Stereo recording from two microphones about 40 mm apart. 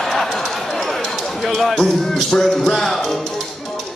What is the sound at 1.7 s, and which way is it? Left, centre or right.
Music, centre.